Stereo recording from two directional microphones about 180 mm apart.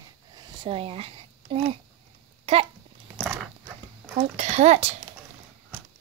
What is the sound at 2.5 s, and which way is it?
Speech, 35° right (ahead or behind).